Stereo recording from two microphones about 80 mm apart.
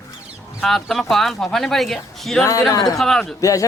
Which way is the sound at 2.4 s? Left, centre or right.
Left.